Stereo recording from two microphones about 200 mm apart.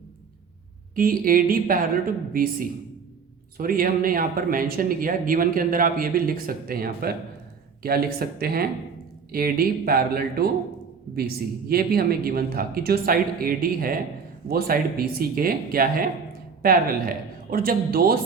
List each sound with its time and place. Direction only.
0.9 s speech: 45° right (ahead or behind)
11.7 s speech: 50° right (ahead or behind)